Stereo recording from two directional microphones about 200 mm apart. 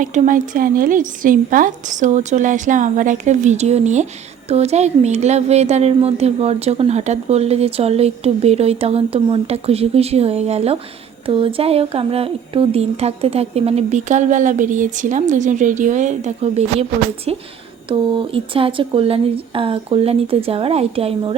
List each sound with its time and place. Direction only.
0.0 s speech: 40° right (ahead or behind)